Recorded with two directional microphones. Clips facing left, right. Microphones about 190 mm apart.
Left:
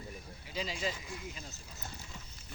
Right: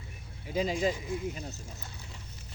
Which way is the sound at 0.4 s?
50° right (ahead or behind).